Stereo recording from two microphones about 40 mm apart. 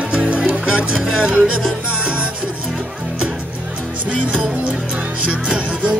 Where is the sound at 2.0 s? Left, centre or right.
Right.